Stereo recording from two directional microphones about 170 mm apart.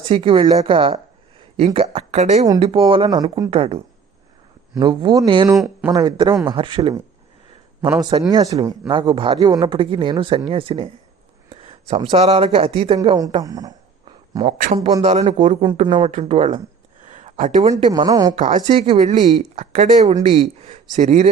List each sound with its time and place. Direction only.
0.0 s speech: 30° right (ahead or behind)
3.5 s speech: 35° right (ahead or behind)
5.5 s speech: 5° right (ahead or behind)
5.9 s speech: 25° right (ahead or behind)
13.0 s speech: 20° right (ahead or behind)
15.0 s speech: 40° right (ahead or behind)
17.0 s a sound: 45° right (ahead or behind)
17.9 s speech: 25° right (ahead or behind)
18.3 s speech: 45° right (ahead or behind)